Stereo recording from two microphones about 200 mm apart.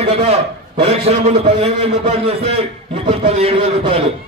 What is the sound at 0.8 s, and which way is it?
A man's voice, 30° right (ahead or behind).